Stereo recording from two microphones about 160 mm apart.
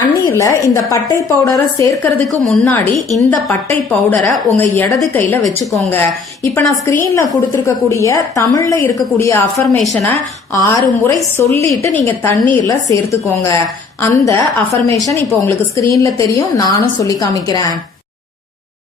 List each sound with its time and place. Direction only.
0.3 s a woman's voice: 15° left (ahead or behind)
5.9 s a woman's voice: 10° left (ahead or behind)
9.8 s speech: centre (ahead or behind)
10.1 s a woman's voice: 20° left (ahead or behind)